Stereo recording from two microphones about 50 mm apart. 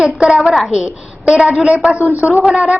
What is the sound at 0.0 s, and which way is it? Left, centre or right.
Speech, centre.